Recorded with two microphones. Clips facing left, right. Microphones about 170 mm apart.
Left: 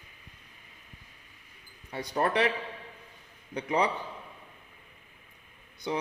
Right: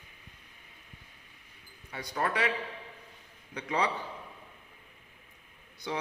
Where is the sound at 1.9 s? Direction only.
35° left (ahead or behind).